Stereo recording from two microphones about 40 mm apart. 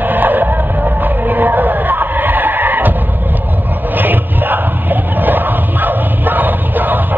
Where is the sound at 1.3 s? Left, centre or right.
Right.